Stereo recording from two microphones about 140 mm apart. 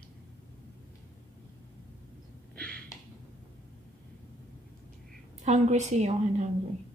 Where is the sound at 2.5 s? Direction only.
10° left (ahead or behind).